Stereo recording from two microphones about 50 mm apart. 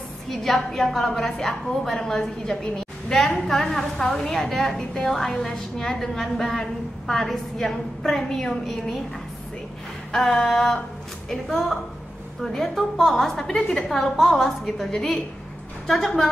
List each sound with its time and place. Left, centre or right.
0.3 s a woman's voice: centre
0.6 s a woman's voice: centre
0.8 s a woman's voice: centre
10.1 s a woman's voice: centre